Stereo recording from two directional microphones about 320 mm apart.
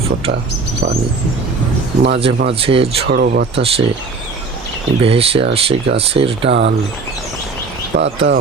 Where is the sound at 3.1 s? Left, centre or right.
Right.